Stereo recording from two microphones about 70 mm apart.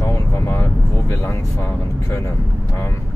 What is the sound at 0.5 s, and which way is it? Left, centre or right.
Speech, left.